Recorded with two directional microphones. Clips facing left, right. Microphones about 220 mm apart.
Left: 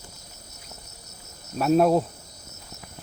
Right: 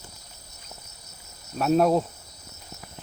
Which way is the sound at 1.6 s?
Centre (ahead or behind).